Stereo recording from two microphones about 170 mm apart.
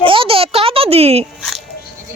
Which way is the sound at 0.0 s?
30° right (ahead or behind).